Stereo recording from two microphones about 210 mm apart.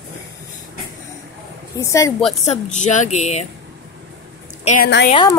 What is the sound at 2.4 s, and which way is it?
A woman's voice, 35° left (ahead or behind).